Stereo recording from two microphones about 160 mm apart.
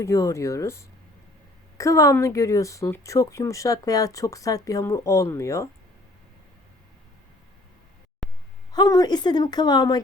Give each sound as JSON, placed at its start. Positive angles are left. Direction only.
{"t": 0.0, "sound": "speech", "side_deg": 20}
{"t": 8.2, "sound": "a sound", "side_deg": 0}
{"t": 8.7, "sound": "speech", "side_deg": 25}